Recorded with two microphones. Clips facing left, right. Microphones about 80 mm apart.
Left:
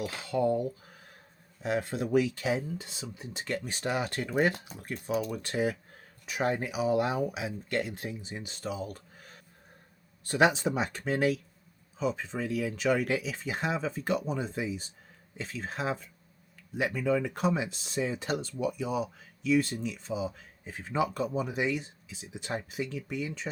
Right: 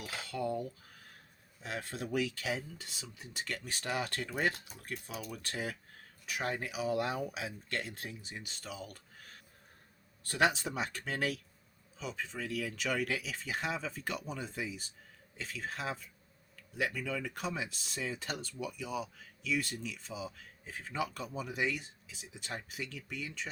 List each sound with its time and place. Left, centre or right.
0.0 s cutlery: centre
1.6 s speech: left
10.2 s speech: left